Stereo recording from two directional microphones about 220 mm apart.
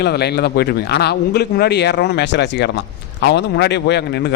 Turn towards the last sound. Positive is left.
turn(degrees=50)  # may be behind; listen again after turning